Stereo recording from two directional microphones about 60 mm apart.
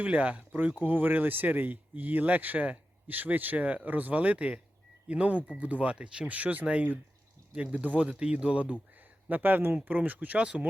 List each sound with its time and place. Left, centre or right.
0.0 s speech: right
10.3 s speech: centre